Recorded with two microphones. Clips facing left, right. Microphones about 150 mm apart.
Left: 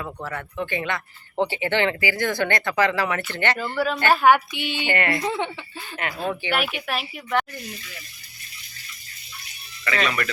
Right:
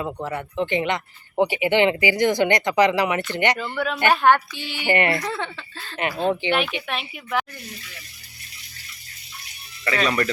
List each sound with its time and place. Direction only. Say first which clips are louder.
0.0 s speech: right 4 dB; 20° right (ahead or behind)
3.8 s a woman's voice: left 2 dB; centre (ahead or behind)
4.4 s speech: left 3 dB; 20° left (ahead or behind)
4.9 s speech: right 5 dB; 20° right (ahead or behind)
5.1 s speech: left 2 dB; 15° left (ahead or behind)
6.0 s speech: right 5 dB; 20° right (ahead or behind)
6.5 s a woman's voice: right 2 dB; 5° left (ahead or behind)
10.1 s speech: right 4 dB; 30° right (ahead or behind)